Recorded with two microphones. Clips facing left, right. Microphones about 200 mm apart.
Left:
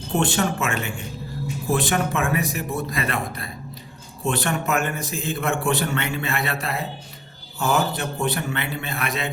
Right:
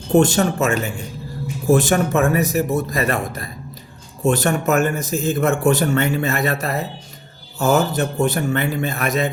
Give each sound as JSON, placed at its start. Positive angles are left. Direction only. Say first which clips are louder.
{"t": 0.2, "sound": "a man's voice", "louder": "right 6 dB", "side_deg": -40}